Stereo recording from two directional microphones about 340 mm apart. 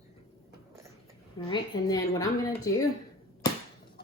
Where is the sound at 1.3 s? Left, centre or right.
Centre.